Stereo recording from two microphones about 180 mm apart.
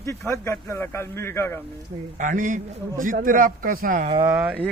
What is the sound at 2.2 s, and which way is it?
A man's voice, 45° right (ahead or behind).